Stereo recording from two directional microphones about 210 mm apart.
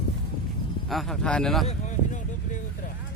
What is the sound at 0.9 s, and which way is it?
Speech, centre (ahead or behind).